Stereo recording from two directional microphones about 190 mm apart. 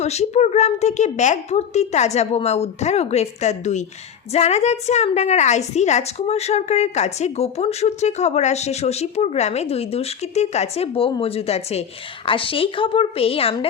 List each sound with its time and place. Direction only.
0.0 s a woman's voice: 35° left (ahead or behind)